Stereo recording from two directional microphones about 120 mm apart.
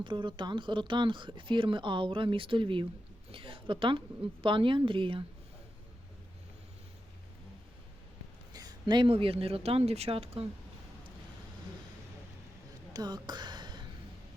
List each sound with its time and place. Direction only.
0.0 s speech: 45° right (ahead or behind)
8.5 s speech: 35° right (ahead or behind); by 10.4 s 55° right (ahead or behind)
12.9 s a sound: 35° right (ahead or behind)